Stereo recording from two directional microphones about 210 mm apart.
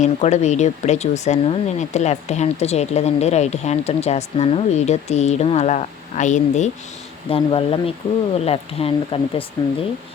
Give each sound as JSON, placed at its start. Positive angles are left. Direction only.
{"t": 0.0, "sound": "speech", "side_deg": 35}